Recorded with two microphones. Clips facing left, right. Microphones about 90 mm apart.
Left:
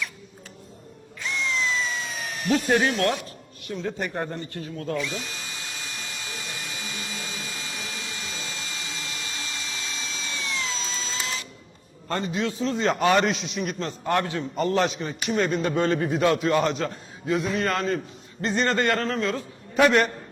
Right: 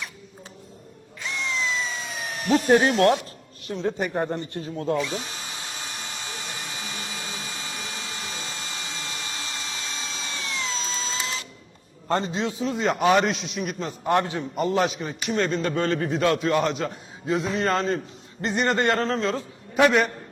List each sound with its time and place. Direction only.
1.6 s a sound: 10° right (ahead or behind)
2.4 s speech: 35° right (ahead or behind)
3.7 s a man's voice: 30° right (ahead or behind)
3.9 s speech: 10° right (ahead or behind)
4.3 s drill: 25° right (ahead or behind)
12.0 s a man's voice: 25° right (ahead or behind)
12.7 s a man's voice: 5° right (ahead or behind)
14.0 s a man's voice: 20° right (ahead or behind)
17.2 s a man's voice: 25° right (ahead or behind)
19.7 s a man's voice: centre (ahead or behind)